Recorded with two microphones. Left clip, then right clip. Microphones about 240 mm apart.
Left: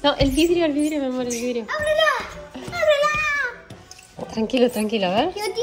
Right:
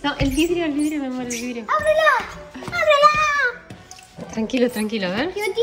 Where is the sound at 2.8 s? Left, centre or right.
Right.